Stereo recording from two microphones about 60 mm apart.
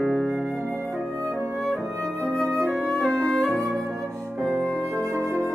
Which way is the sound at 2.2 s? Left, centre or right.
Centre.